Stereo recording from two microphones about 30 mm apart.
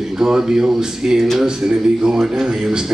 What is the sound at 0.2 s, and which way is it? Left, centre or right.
Speech, centre.